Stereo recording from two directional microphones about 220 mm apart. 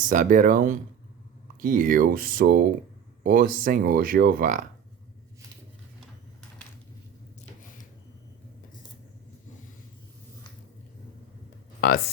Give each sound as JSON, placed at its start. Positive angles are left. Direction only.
{"t": 0.0, "sound": "speech", "side_deg": -35}